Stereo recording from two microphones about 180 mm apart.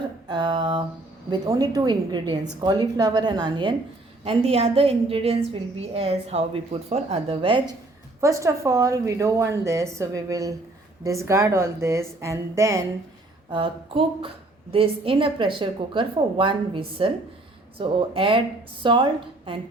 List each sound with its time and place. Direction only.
0.3 s a woman's voice: 25° right (ahead or behind)
8.2 s a woman's voice: 15° right (ahead or behind)
13.5 s a woman's voice: 30° right (ahead or behind)